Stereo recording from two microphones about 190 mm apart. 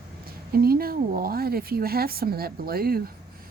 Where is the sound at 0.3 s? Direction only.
50° right (ahead or behind).